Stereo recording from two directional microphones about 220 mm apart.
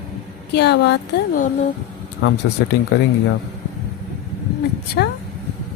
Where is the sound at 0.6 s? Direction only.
50° left (ahead or behind).